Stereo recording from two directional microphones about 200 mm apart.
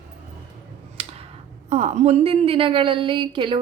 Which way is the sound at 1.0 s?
30° right (ahead or behind).